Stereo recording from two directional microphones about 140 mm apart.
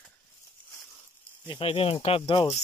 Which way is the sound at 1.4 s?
40° left (ahead or behind).